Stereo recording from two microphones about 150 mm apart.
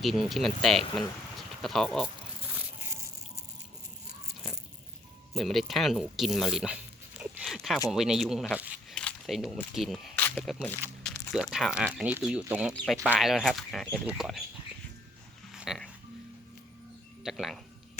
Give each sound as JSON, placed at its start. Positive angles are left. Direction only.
{"t": 0.0, "sound": "speech", "side_deg": 0}
{"t": 5.3, "sound": "speech", "side_deg": 0}
{"t": 8.6, "sound": "a sound", "side_deg": -10}
{"t": 9.0, "sound": "camera", "side_deg": 5}
{"t": 9.7, "sound": "speech", "side_deg": 0}
{"t": 10.2, "sound": "speech", "side_deg": 10}
{"t": 11.1, "sound": "a sound", "side_deg": 5}
{"t": 11.5, "sound": "speech", "side_deg": -5}
{"t": 15.5, "sound": "music", "side_deg": -5}
{"t": 17.2, "sound": "speech", "side_deg": 0}